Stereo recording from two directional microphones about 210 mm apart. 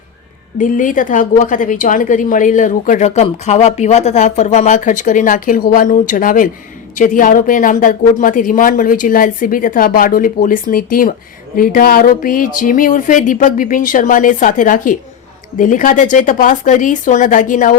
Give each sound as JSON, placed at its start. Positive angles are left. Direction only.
{"t": 0.6, "sound": "a woman's voice", "side_deg": 40}